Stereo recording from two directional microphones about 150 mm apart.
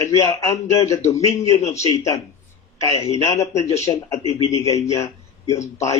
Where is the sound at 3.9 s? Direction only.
25° left (ahead or behind).